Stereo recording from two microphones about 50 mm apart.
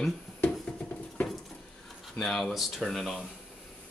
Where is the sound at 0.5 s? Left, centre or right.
Centre.